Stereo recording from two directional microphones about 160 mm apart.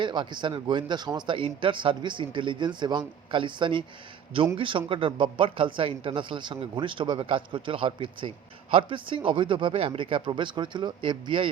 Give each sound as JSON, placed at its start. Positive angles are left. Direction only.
{"t": 0.0, "sound": "a man's voice", "side_deg": -30}